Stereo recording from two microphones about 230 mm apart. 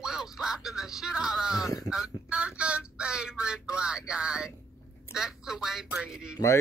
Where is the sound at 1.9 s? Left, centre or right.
Centre.